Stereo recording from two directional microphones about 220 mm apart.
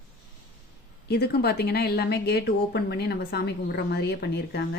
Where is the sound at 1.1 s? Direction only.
45° left (ahead or behind).